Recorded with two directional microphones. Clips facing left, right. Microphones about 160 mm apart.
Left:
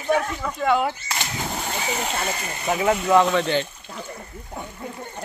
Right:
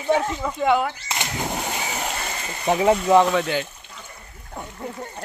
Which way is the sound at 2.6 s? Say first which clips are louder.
Right 3 dB; 30° right (ahead or behind).